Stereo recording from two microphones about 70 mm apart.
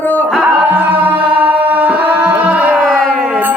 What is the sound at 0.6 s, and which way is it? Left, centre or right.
Music, right.